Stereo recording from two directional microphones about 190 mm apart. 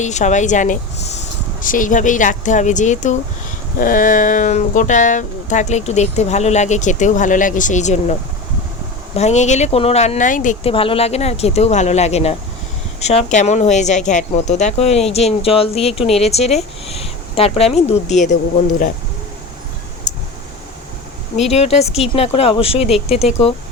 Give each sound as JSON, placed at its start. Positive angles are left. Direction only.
{"t": 0.0, "sound": "speech", "side_deg": 40}
{"t": 9.1, "sound": "speech", "side_deg": 35}
{"t": 21.5, "sound": "speech", "side_deg": 35}